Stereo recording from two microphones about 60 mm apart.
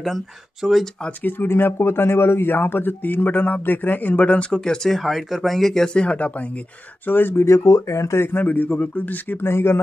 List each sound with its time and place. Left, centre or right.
0.0 s speech: centre
1.2 s speech: left
4.5 s speech: centre
6.0 s speech: left
7.1 s speech: left
7.4 s speech: left
8.2 s speech: left
9.5 s speech: left